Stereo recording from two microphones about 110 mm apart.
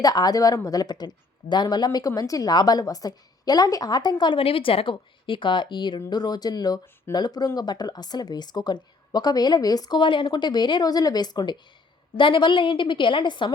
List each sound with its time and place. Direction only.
0.0 s a woman's voice: 35° left (ahead or behind)